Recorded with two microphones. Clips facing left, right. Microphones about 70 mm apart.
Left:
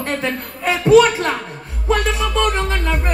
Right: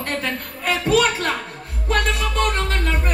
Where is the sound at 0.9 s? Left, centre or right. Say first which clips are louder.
Left 8 dB; left.